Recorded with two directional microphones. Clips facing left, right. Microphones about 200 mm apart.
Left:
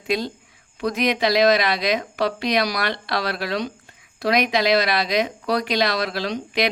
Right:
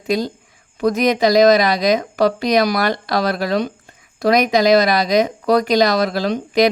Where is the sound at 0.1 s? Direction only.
40° right (ahead or behind).